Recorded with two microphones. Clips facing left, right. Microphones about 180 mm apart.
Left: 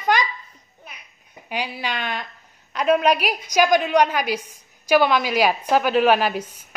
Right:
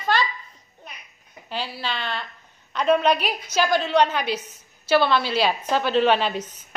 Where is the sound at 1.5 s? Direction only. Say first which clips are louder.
Left 2 dB; 15° left (ahead or behind).